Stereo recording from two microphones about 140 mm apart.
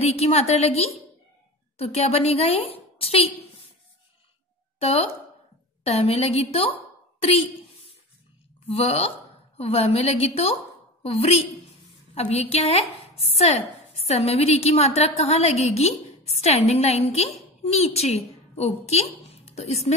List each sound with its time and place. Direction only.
0.0 s a woman's voice: 50° left (ahead or behind)
4.7 s a woman's voice: 45° left (ahead or behind)
7.2 s a sound: 45° left (ahead or behind)
8.6 s a woman's voice: 45° left (ahead or behind)